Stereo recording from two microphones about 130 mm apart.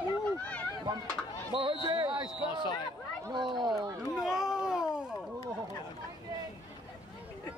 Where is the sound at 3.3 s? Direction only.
35° right (ahead or behind).